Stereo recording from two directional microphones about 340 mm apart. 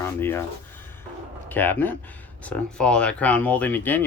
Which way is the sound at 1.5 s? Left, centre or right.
Centre.